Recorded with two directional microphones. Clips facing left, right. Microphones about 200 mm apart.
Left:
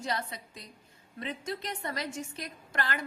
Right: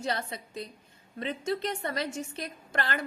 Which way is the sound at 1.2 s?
25° right (ahead or behind).